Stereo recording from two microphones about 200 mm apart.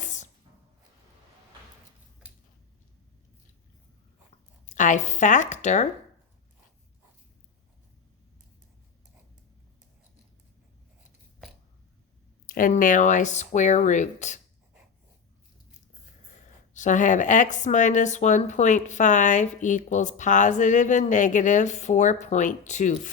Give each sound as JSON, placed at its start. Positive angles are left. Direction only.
{"t": 0.0, "sound": "a sound", "side_deg": 40}
{"t": 4.6, "sound": "speech", "side_deg": 40}
{"t": 12.5, "sound": "speech", "side_deg": 45}
{"t": 16.7, "sound": "speech", "side_deg": 40}